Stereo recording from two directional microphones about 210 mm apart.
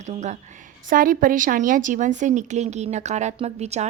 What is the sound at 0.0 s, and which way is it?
Speech, 35° right (ahead or behind).